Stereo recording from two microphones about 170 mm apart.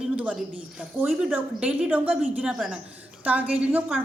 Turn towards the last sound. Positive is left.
turn(degrees=-10)  # may be behind; listen again after turning